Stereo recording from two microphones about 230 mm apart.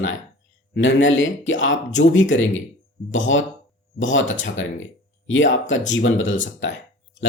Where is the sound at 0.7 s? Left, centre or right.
Left.